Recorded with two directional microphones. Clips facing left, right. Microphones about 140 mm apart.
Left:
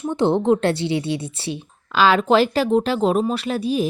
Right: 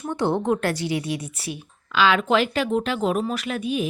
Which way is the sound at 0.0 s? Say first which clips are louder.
Left 5 dB; 20° left (ahead or behind).